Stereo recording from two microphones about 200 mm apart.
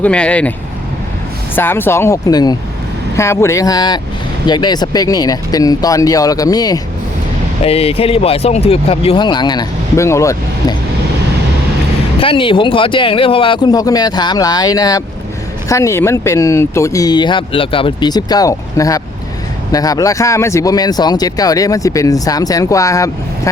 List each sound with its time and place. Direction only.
0.0 s speech: 5° left (ahead or behind)
1.5 s speech: 10° left (ahead or behind)
7.6 s speech: 30° left (ahead or behind)
12.2 s speech: 25° left (ahead or behind)